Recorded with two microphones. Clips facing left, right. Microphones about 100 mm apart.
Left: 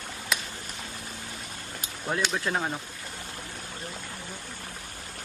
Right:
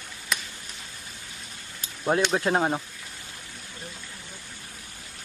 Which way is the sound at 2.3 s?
35° right (ahead or behind).